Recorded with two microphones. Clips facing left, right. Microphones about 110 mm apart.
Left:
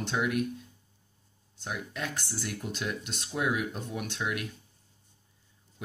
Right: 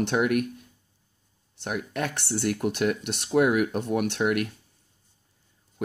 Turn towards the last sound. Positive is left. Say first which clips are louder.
# right 10 dB
turn(degrees=-60)  # may be behind; listen again after turning